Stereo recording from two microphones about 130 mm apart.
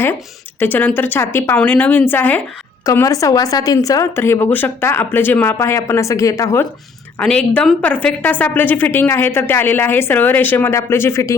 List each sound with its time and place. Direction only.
0.6 s a woman's voice: 15° left (ahead or behind)
7.2 s a woman's voice: 10° left (ahead or behind)